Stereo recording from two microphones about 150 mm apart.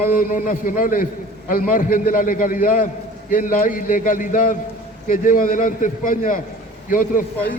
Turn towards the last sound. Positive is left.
turn(degrees=65)  # may be behind; listen again after turning